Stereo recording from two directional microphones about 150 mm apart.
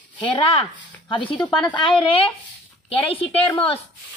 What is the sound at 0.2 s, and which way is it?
A woman's voice, 35° left (ahead or behind).